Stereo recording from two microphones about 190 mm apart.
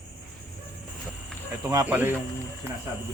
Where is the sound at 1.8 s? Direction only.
10° right (ahead or behind).